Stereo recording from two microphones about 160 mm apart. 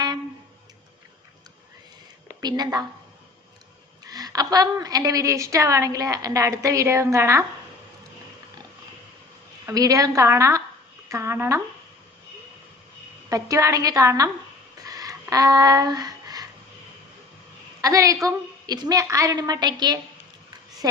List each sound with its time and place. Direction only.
2.4 s a woman's voice: 25° right (ahead or behind)
4.0 s a woman's voice: 25° right (ahead or behind)
9.6 s a woman's voice: 20° right (ahead or behind)
13.3 s a woman's voice: 20° right (ahead or behind)
14.8 s a sound: 20° right (ahead or behind)
17.7 s a woman's voice: 20° right (ahead or behind)